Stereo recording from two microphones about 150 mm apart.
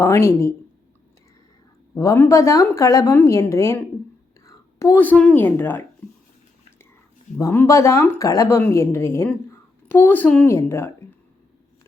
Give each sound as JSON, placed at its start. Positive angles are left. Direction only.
{"t": 0.0, "sound": "speech", "side_deg": 20}
{"t": 2.0, "sound": "a woman's voice", "side_deg": 20}
{"t": 7.3, "sound": "a woman's voice", "side_deg": 20}